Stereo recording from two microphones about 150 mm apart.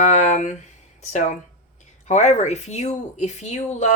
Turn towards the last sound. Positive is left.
turn(degrees=50)  # may be behind; listen again after turning